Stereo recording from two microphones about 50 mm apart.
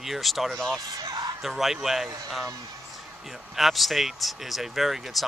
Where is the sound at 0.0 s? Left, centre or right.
Centre.